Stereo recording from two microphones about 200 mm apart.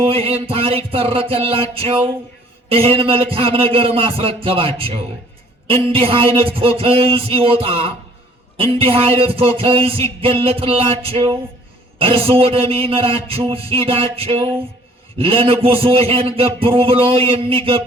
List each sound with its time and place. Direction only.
0.0 s music: 30° right (ahead or behind)